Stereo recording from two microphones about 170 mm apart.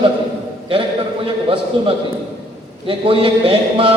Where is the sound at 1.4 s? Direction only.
30° right (ahead or behind).